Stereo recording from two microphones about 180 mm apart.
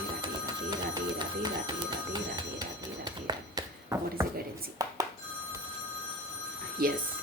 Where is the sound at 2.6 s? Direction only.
20° right (ahead or behind).